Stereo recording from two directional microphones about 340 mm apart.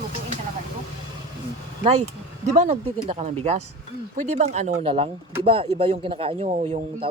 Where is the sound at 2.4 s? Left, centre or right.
Centre.